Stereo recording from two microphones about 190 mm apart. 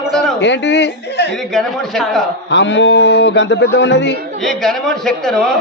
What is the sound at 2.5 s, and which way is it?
Speech, 65° left (ahead or behind).